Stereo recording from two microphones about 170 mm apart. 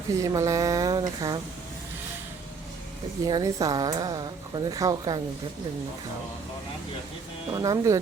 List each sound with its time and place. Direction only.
0.1 s a woman's voice: 20° right (ahead or behind)
3.2 s a woman's voice: 20° right (ahead or behind)
7.5 s a woman's voice: 20° right (ahead or behind)